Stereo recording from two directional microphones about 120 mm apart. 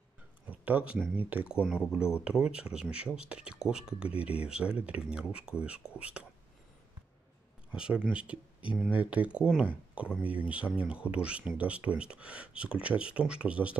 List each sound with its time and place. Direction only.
0.5 s a sound: 10° right (ahead or behind)
1.1 s speech: 10° right (ahead or behind)
7.7 s speech: 10° right (ahead or behind)